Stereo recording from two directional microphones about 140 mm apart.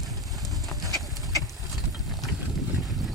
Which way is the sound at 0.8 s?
25° right (ahead or behind).